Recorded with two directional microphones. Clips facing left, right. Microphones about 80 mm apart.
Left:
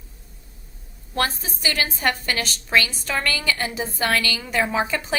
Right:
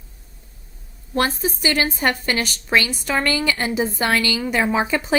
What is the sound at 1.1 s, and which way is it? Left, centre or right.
A woman's voice, right.